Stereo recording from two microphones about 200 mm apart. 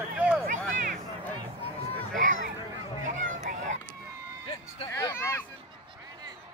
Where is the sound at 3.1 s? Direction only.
40° right (ahead or behind).